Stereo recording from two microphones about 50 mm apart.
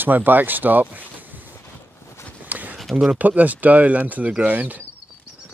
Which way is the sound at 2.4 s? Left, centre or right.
Right.